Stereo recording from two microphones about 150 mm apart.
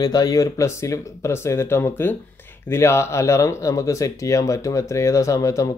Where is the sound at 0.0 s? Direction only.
25° left (ahead or behind).